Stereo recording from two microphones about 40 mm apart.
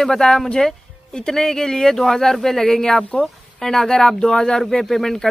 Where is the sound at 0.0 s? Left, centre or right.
Centre.